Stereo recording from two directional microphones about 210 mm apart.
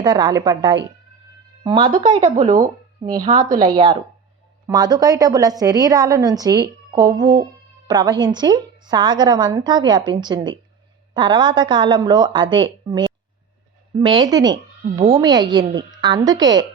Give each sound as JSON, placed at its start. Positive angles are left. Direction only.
{"t": 0.0, "sound": "a woman's voice", "side_deg": -20}
{"t": 2.3, "sound": "speech", "side_deg": -35}
{"t": 3.1, "sound": "a woman's voice", "side_deg": -20}